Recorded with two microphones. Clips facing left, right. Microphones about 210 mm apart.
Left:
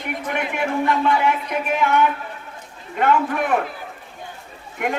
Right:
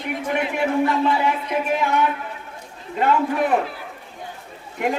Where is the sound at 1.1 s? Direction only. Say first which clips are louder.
Left 1 dB; 25° right (ahead or behind).